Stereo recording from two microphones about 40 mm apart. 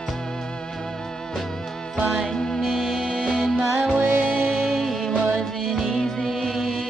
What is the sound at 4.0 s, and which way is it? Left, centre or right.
Music, right.